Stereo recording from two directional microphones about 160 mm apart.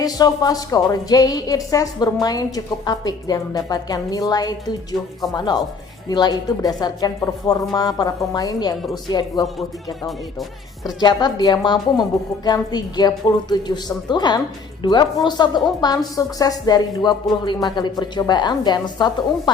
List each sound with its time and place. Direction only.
0.0 s a woman's voice: 25° left (ahead or behind)
10.8 s a woman's voice: 25° left (ahead or behind)